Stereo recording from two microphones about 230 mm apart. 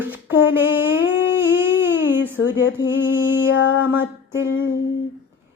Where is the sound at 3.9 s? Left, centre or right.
Centre.